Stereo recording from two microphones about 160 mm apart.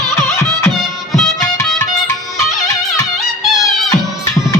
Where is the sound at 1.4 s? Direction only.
15° left (ahead or behind).